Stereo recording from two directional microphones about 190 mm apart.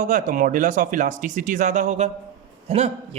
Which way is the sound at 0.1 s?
45° right (ahead or behind).